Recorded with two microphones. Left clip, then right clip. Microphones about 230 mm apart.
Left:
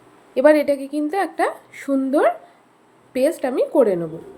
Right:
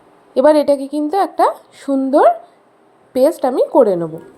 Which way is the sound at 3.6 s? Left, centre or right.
Centre.